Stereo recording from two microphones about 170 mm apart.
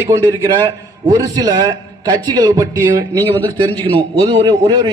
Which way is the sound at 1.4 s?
20° right (ahead or behind).